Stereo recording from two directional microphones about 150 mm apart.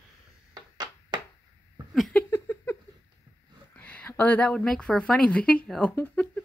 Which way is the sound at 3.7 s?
10° left (ahead or behind).